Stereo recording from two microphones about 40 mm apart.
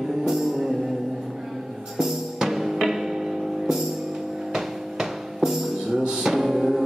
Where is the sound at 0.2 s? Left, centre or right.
Centre.